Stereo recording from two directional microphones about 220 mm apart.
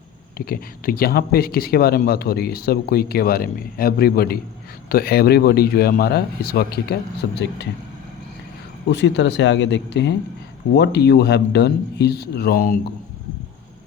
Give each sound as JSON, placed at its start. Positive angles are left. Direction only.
{"t": 0.3, "sound": "speech", "side_deg": 40}
{"t": 8.9, "sound": "speech", "side_deg": 55}